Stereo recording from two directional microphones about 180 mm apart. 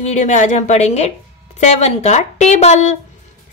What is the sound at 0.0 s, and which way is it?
A woman's voice, 40° left (ahead or behind).